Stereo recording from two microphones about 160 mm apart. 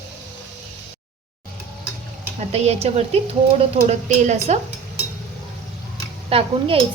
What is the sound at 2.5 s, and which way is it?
A woman's voice, 40° right (ahead or behind).